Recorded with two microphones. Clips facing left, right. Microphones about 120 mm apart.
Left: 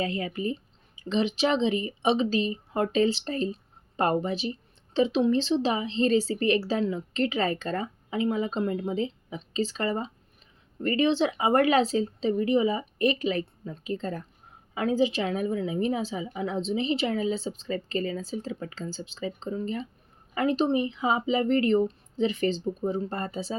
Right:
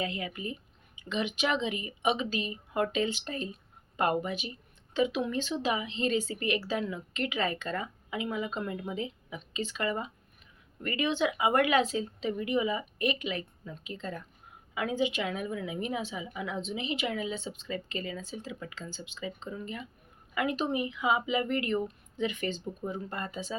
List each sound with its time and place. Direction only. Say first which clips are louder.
0.0 s speech: left 6 dB; 35° left (ahead or behind)